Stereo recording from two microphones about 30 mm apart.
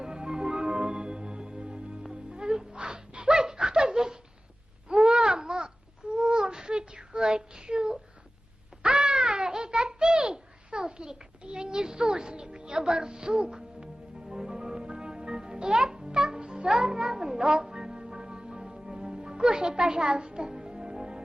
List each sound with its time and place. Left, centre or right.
0.0 s music: right
2.7 s a sound: right
3.4 s laughter: right
4.9 s babbling: right
8.8 s a sound: right
13.7 s music: centre